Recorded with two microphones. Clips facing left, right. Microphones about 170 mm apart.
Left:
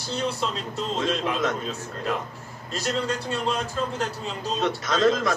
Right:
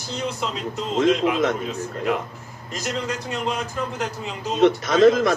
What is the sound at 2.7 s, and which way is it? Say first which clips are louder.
A man's voice: left 1 dB; 15° right (ahead or behind).